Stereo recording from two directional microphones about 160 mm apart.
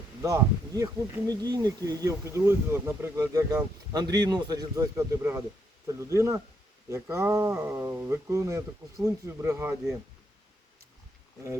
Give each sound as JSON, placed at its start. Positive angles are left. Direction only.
{"t": 0.2, "sound": "speech", "side_deg": -20}